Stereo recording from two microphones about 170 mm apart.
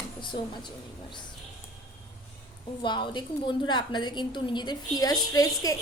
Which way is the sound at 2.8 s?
30° left (ahead or behind).